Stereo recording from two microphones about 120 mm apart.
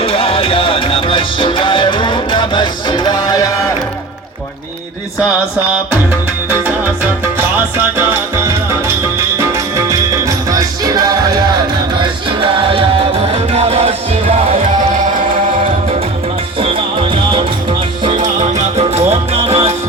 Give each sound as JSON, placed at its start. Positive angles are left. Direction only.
{"t": 0.0, "sound": "music", "side_deg": 50}
{"t": 9.4, "sound": "music", "side_deg": -25}
{"t": 13.5, "sound": "music", "side_deg": -60}
{"t": 16.6, "sound": "music", "side_deg": -50}
{"t": 18.2, "sound": "music", "side_deg": -85}